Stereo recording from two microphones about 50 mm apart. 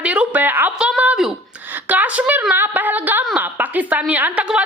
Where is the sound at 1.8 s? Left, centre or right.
Right.